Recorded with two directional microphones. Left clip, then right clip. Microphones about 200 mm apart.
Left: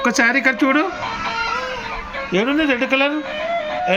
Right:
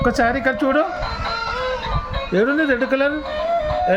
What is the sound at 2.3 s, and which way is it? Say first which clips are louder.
Speech: even; 35° right (ahead or behind).